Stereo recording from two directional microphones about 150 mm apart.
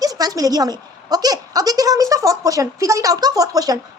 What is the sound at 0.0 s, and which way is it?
A woman's voice, 25° right (ahead or behind).